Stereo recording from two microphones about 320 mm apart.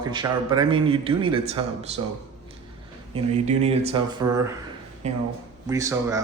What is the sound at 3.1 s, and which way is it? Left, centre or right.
Speech, centre.